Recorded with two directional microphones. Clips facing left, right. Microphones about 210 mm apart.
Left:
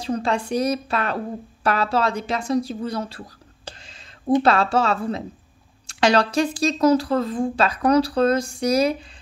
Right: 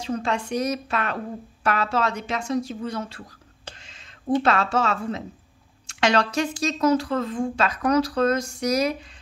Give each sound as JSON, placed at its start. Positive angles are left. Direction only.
{"t": 0.0, "sound": "speech", "side_deg": 35}